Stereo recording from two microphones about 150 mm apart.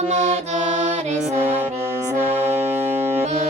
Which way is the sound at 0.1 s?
45° right (ahead or behind).